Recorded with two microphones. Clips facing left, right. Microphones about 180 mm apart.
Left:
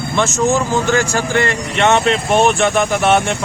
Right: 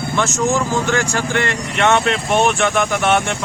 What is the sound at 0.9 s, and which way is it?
Speech, 35° left (ahead or behind).